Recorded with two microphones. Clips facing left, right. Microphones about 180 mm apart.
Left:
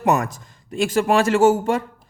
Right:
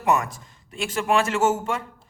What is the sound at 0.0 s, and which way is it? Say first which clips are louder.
A man's voice: left 3 dB; 40° left (ahead or behind).